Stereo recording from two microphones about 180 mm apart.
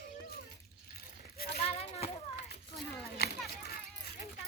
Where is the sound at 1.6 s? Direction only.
35° left (ahead or behind).